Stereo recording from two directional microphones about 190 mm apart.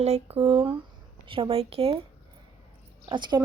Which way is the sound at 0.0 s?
30° right (ahead or behind).